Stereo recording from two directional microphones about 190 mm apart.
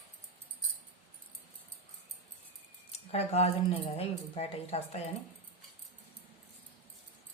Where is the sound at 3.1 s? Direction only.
30° left (ahead or behind).